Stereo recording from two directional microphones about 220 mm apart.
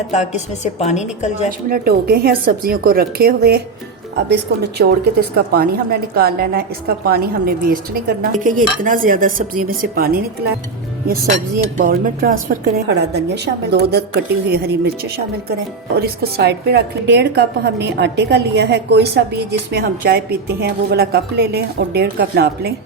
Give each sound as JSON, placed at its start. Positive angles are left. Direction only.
{"t": 0.1, "sound": "a woman's voice", "side_deg": 30}
{"t": 1.7, "sound": "a woman's voice", "side_deg": -45}
{"t": 4.8, "sound": "a woman's voice", "side_deg": -45}
{"t": 16.0, "sound": "a woman's voice", "side_deg": -45}